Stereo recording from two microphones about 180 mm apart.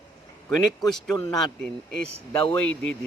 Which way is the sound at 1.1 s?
20° left (ahead or behind).